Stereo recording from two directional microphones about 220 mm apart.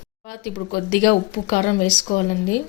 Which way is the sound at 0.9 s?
45° left (ahead or behind).